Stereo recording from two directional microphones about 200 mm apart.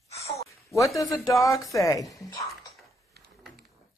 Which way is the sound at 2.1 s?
15° left (ahead or behind).